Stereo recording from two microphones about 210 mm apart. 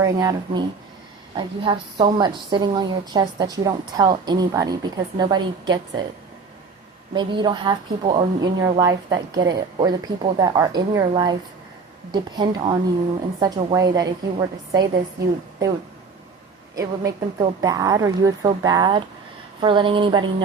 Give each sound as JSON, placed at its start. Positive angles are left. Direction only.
{"t": 0.0, "sound": "a woman's voice", "side_deg": -15}
{"t": 7.1, "sound": "a woman's voice", "side_deg": -20}
{"t": 16.7, "sound": "a woman's voice", "side_deg": -15}